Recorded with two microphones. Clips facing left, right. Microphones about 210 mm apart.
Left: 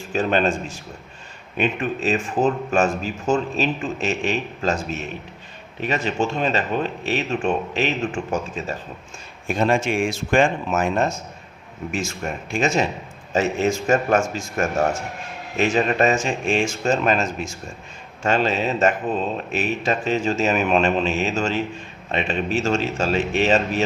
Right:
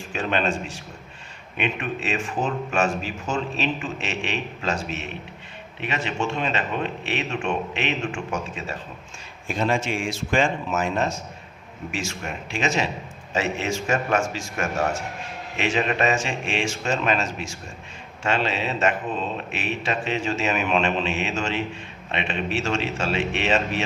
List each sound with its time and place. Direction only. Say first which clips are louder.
0.1 s a man's voice: left 5 dB; 40° left (ahead or behind)
1.5 s a man's voice: left 4 dB; 40° left (ahead or behind)
9.5 s a man's voice: left 4 dB; 50° left (ahead or behind)